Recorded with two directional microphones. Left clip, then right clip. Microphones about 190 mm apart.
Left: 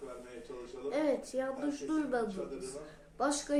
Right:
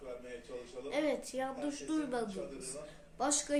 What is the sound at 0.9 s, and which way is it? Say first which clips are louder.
Speech: left 2 dB; 25° left (ahead or behind).